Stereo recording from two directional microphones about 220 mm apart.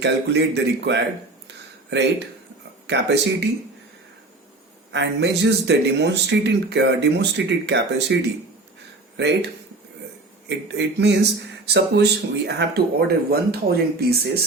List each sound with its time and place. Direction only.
0.0 s speech: 50° right (ahead or behind)
4.9 s speech: 50° right (ahead or behind)
10.5 s speech: 50° right (ahead or behind)